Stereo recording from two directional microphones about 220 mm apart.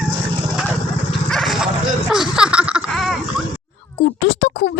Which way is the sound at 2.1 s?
5° right (ahead or behind).